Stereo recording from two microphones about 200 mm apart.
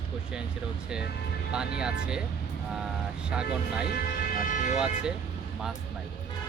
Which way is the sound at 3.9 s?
45° left (ahead or behind).